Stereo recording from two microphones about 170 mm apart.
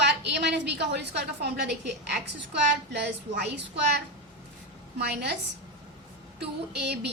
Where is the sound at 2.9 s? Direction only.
80° right.